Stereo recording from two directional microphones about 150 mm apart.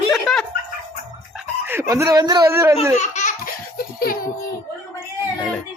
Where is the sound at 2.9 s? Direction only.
50° left (ahead or behind); by 4.3 s 80° left.